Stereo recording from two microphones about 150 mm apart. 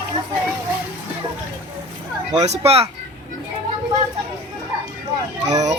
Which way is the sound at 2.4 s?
45° right (ahead or behind).